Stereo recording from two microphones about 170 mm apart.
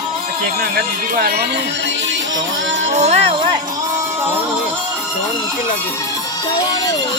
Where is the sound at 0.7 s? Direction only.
60° right (ahead or behind); by 2.8 s 90° right.